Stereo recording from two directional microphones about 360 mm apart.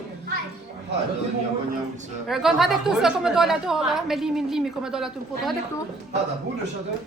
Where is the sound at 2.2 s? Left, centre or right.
Centre.